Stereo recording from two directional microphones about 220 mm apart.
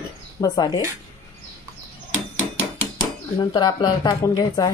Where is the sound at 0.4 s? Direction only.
15° left (ahead or behind).